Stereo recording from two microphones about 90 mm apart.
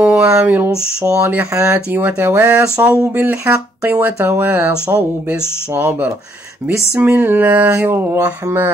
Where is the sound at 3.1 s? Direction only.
25° right (ahead or behind).